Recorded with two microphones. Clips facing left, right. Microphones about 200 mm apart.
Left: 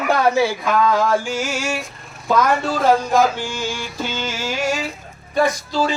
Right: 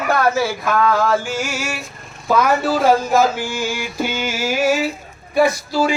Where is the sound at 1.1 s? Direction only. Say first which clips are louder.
Even; 5° right (ahead or behind).